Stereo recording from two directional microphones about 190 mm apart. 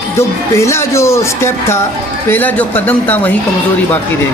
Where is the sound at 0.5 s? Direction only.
15° left (ahead or behind).